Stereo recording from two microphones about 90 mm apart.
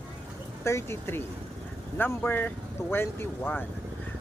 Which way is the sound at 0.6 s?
30° left (ahead or behind).